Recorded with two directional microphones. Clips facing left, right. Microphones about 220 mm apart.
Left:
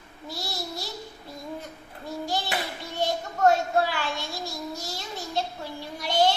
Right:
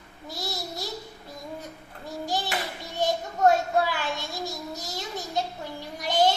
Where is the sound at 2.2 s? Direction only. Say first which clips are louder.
Right 1 dB; 15° right (ahead or behind).